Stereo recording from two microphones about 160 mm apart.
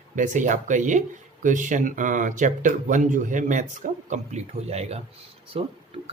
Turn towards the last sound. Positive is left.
turn(degrees=-35)  # may be behind; listen again after turning